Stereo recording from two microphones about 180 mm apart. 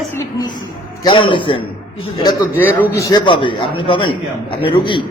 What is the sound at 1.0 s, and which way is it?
Speech, 30° left (ahead or behind).